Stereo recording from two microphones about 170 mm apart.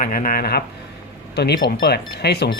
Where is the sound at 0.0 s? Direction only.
55° left (ahead or behind).